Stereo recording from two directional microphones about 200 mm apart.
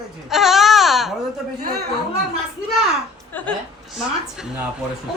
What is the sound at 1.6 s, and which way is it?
Speech, 50° right (ahead or behind).